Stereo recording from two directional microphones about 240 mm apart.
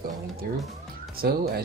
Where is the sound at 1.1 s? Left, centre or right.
Right.